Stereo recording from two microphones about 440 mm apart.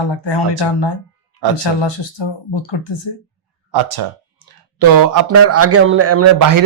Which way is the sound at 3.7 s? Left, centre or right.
Right.